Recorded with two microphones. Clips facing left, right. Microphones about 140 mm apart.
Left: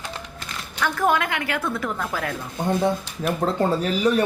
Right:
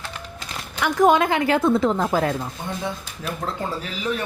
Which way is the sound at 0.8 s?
15° right (ahead or behind).